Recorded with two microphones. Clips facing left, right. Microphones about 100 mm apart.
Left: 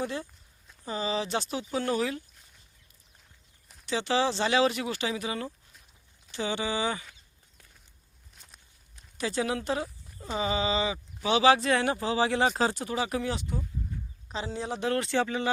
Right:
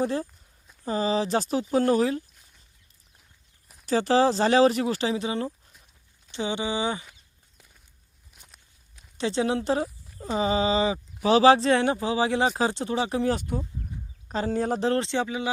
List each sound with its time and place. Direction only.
0.0 s speech: 35° right (ahead or behind)
3.8 s speech: 40° right (ahead or behind); by 7.2 s 20° right (ahead or behind)
8.3 s walk: 5° right (ahead or behind)
9.1 s speech: 30° right (ahead or behind)
13.2 s speech: 50° right (ahead or behind)
14.8 s speech: 30° right (ahead or behind); by 15.4 s 15° right (ahead or behind)